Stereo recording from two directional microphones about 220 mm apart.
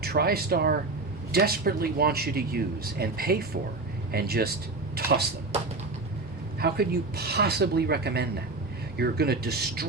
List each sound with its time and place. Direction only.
0.0 s speech: 45° right (ahead or behind)
4.9 s a sound: 45° right (ahead or behind)
6.6 s speech: 45° right (ahead or behind)